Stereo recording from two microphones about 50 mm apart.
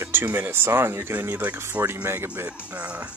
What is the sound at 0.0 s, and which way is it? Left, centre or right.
Speech, right.